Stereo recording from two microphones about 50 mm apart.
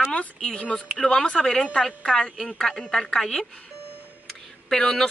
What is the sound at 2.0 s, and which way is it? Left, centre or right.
Speech, centre.